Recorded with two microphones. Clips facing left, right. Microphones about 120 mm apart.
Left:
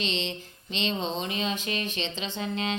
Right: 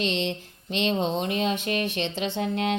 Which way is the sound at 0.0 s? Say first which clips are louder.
Right 5 dB; 55° right (ahead or behind).